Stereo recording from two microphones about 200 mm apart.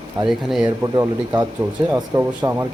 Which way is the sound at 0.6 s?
20° right (ahead or behind).